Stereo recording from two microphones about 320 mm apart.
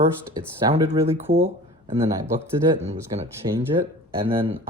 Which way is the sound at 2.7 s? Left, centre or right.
Centre.